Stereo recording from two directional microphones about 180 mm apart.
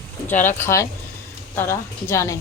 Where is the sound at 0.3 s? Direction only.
10° left (ahead or behind).